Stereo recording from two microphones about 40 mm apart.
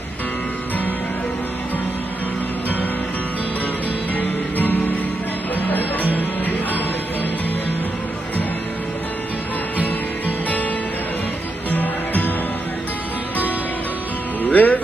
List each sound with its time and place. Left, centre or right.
4.6 s music: left
6.1 s music: left
9.8 s music: left
11.7 s music: left
14.5 s music: left